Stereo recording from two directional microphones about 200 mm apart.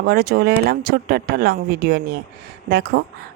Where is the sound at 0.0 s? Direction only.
50° right (ahead or behind).